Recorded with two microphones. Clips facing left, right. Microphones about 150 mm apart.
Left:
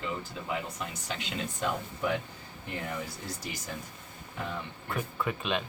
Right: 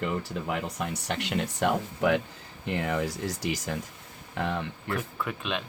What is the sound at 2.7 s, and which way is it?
Speech, 90° right.